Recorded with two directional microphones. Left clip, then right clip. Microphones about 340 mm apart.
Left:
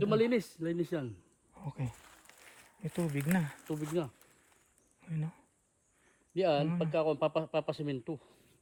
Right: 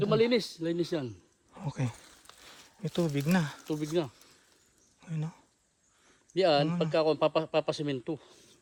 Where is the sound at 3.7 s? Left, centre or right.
Right.